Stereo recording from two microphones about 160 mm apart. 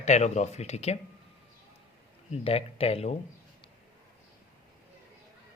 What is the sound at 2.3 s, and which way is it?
Speech, 40° left (ahead or behind).